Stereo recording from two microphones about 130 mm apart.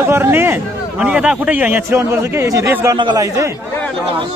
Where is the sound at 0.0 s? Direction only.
20° right (ahead or behind).